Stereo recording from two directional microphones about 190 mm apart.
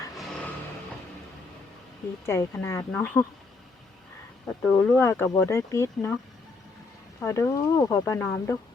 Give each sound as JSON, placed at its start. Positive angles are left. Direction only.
{"t": 2.2, "sound": "speech", "side_deg": 15}
{"t": 4.6, "sound": "speech", "side_deg": 10}
{"t": 7.2, "sound": "speech", "side_deg": 15}